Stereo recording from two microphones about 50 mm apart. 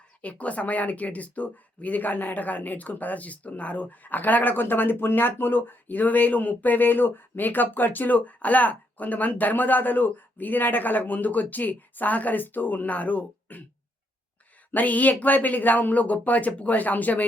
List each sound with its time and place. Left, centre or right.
0.2 s speech: left
14.7 s speech: left